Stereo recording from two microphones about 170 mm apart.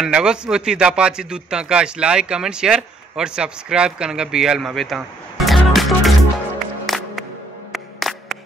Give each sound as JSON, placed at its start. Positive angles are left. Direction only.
{"t": 0.0, "sound": "a man's voice", "side_deg": -5}
{"t": 6.9, "sound": "music", "side_deg": 0}